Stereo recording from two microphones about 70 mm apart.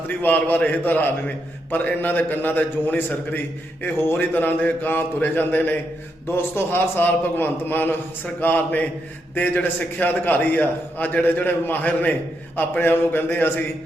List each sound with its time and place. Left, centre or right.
0.1 s a man's voice: left